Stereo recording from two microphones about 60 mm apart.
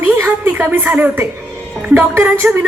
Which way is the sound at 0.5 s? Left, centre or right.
Right.